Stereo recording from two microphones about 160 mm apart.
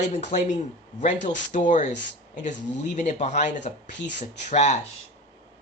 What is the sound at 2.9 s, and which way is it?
Speech, 50° left (ahead or behind).